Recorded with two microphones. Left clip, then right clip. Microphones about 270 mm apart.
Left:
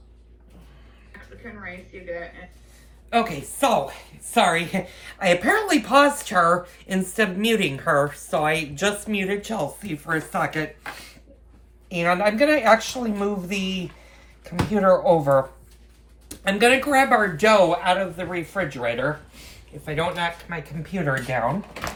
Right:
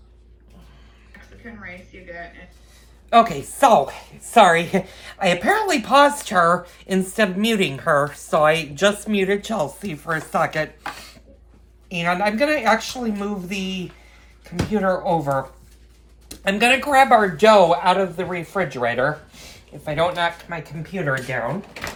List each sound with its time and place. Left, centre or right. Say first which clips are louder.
1.6 s speech: left 3 dB; left
3.1 s a woman's voice: right 7 dB; centre
11.9 s speech: even; centre
16.3 s a woman's voice: right 1 dB; centre
20.9 s speech: right 2 dB; centre
21.7 s a sound: even; left